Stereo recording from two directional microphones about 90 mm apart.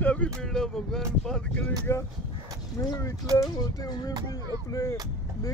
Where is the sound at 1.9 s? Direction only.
30° left (ahead or behind).